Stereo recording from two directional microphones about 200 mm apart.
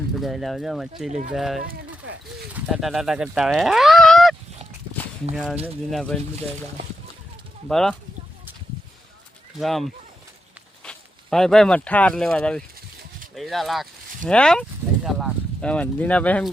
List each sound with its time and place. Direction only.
0.2 s speech: centre (ahead or behind)
1.6 s a sound: 50° right (ahead or behind)
2.5 s speech: 5° right (ahead or behind)
7.7 s speech: centre (ahead or behind)
9.6 s speech: centre (ahead or behind)